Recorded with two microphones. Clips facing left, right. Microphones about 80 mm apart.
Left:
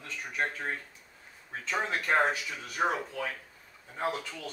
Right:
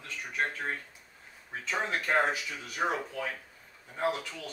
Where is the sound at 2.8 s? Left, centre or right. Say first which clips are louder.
Left 2 dB; centre.